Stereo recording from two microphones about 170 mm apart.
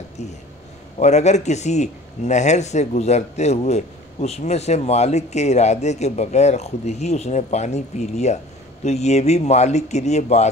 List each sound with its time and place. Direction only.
0.2 s a man's voice: 40° left (ahead or behind)